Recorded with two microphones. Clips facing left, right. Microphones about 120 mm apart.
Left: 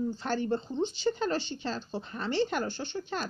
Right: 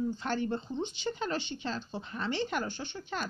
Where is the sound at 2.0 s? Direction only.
20° left (ahead or behind).